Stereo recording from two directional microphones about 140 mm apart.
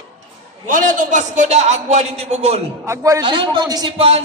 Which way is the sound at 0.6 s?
70° right (ahead or behind).